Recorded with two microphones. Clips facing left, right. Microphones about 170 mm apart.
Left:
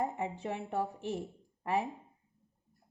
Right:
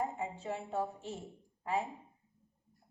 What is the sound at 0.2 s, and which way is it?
Speech, 65° left (ahead or behind).